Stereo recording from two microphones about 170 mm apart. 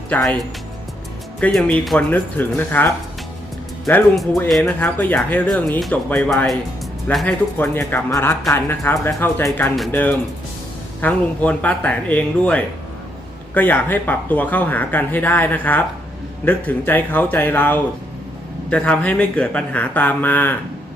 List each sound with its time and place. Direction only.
0.1 s speech: 10° left (ahead or behind)
1.4 s speech: 5° left (ahead or behind)
4.6 s speech: 10° left (ahead or behind)
7.6 s speech: 10° left (ahead or behind)